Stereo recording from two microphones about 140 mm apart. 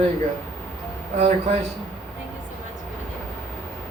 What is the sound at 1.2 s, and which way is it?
Speech, 50° right (ahead or behind).